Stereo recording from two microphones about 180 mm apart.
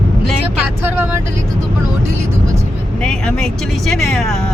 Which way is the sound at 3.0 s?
5° left (ahead or behind).